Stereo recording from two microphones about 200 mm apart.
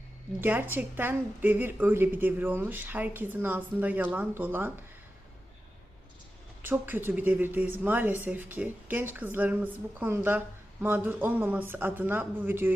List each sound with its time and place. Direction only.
0.4 s speech: 10° right (ahead or behind)
6.6 s speech: 10° right (ahead or behind)